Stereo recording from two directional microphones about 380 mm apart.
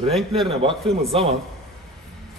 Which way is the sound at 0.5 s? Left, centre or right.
Centre.